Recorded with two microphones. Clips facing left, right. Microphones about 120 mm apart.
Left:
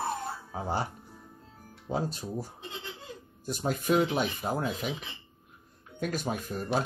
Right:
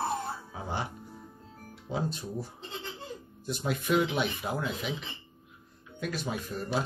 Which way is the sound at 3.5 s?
40° left (ahead or behind).